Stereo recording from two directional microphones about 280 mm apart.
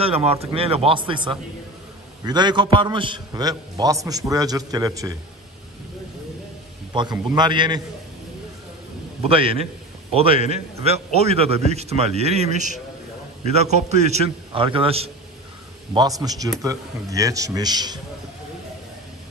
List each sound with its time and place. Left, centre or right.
0.0 s a man's voice: right
6.9 s a man's voice: centre
9.2 s a man's voice: centre